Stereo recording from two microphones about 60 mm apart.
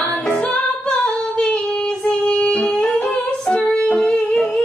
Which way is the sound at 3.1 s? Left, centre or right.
Left.